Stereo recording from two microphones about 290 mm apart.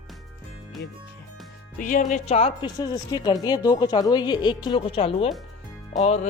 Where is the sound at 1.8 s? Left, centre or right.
Left.